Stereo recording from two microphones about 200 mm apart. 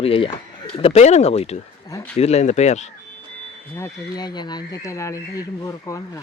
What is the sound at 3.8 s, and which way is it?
Speech, 20° left (ahead or behind).